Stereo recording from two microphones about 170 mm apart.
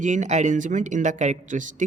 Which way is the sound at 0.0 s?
45° right (ahead or behind).